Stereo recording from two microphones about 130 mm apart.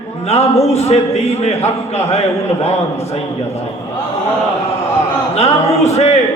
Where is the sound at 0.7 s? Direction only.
55° left (ahead or behind).